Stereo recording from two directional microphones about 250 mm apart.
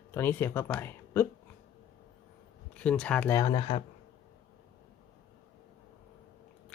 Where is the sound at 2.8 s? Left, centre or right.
Centre.